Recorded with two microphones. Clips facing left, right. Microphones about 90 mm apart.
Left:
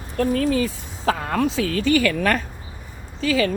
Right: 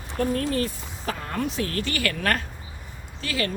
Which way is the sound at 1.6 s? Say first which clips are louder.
Left 5 dB; 90° left.